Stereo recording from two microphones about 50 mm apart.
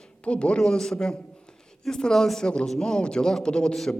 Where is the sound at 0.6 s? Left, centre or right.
Centre.